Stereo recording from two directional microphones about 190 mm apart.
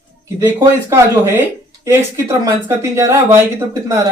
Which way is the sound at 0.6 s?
15° right (ahead or behind).